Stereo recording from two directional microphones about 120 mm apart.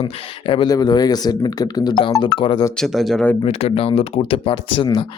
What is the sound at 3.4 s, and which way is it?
Speech, 55° left (ahead or behind).